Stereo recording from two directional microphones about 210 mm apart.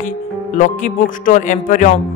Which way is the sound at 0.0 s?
35° left (ahead or behind).